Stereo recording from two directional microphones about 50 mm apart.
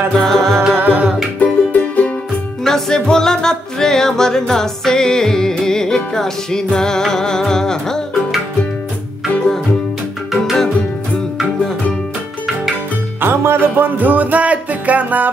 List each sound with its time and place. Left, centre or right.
0.2 s music: centre
0.7 s music: right
1.4 s music: left
2.6 s music: centre
10.3 s music: centre
13.2 s music: right